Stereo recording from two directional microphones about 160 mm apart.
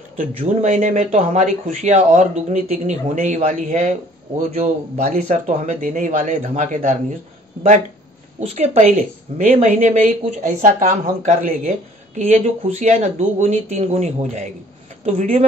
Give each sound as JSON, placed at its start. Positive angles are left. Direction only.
{"t": 0.2, "sound": "speech", "side_deg": -50}
{"t": 8.4, "sound": "a woman's voice", "side_deg": -40}
{"t": 12.2, "sound": "a woman's voice", "side_deg": -40}